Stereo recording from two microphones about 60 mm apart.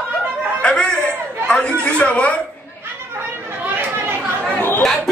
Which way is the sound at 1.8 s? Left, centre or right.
Left.